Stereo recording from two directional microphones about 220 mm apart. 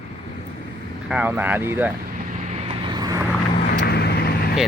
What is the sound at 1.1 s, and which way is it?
Speech, 5° right (ahead or behind).